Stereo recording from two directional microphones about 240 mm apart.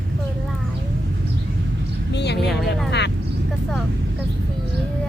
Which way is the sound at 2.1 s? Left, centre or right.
Left.